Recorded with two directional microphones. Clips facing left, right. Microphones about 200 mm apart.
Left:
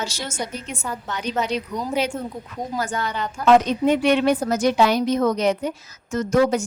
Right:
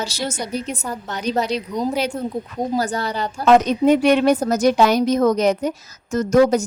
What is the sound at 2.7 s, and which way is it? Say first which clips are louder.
A woman's voice: right 3 dB; 35° right (ahead or behind).